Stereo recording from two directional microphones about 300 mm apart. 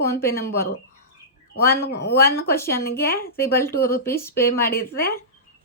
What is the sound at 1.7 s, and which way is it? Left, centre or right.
Speech, left.